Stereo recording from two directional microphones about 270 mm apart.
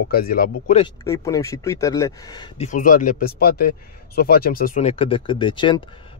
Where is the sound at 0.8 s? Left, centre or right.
Centre.